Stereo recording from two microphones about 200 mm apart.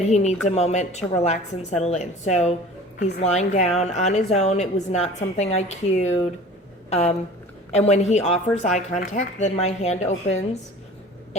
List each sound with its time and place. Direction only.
0.1 s speech: 35° left (ahead or behind)